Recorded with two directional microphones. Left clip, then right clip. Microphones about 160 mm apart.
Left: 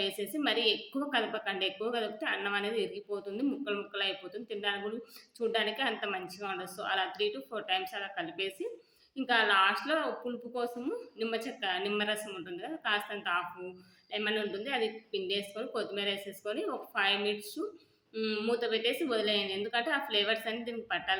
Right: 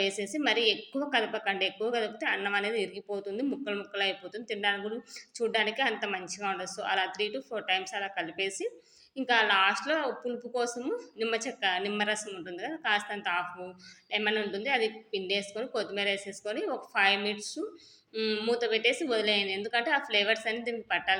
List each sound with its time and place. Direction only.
0.0 s a woman's voice: 15° right (ahead or behind)